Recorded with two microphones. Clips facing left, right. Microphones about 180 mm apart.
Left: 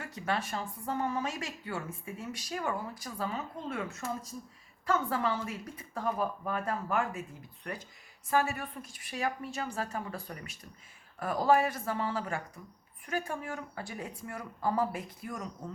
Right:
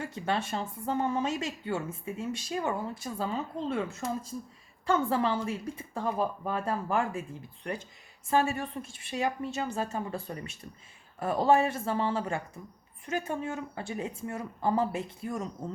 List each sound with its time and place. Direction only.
0.0 s speech: 25° right (ahead or behind)